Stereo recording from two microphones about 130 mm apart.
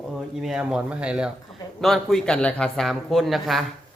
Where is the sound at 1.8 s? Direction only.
5° left (ahead or behind).